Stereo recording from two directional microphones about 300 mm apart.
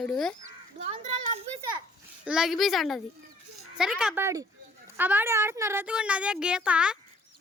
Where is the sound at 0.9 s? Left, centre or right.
Right.